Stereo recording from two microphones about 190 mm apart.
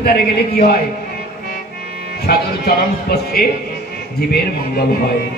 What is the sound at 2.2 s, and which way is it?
Speech, 55° left (ahead or behind).